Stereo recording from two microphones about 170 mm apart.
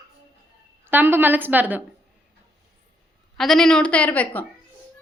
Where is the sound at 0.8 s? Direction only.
15° right (ahead or behind).